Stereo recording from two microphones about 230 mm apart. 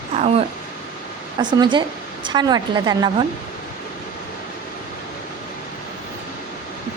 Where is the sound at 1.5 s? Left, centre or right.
Centre.